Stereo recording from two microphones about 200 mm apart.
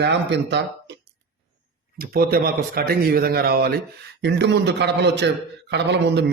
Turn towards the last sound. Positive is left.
turn(degrees=-60)  # may be behind; listen again after turning